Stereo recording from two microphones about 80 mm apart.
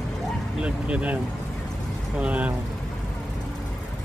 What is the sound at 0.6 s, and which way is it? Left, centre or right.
Speech, centre.